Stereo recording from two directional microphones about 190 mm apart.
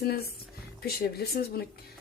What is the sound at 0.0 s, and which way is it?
A woman's voice, 55° left (ahead or behind).